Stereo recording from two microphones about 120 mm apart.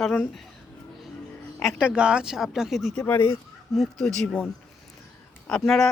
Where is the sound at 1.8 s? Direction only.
10° right (ahead or behind).